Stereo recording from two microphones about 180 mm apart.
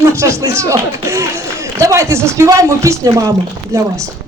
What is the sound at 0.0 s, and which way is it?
Speech, 15° right (ahead or behind).